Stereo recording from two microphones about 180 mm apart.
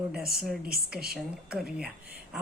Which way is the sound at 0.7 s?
55° right (ahead or behind).